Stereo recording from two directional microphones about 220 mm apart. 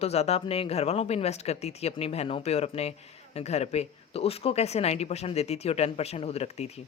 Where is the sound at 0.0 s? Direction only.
30° left (ahead or behind).